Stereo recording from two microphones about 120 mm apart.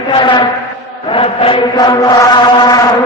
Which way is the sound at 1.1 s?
50° left (ahead or behind).